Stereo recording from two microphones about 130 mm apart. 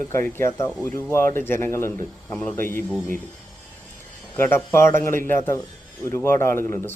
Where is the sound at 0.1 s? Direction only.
20° left (ahead or behind).